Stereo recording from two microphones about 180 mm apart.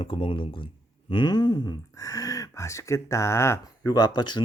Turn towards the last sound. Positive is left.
turn(degrees=25)  # may be behind; listen again after turning